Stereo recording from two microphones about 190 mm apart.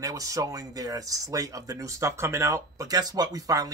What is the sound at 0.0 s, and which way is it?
Speech, 20° right (ahead or behind).